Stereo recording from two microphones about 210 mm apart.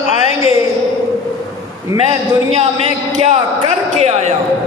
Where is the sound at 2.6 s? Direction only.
30° right (ahead or behind).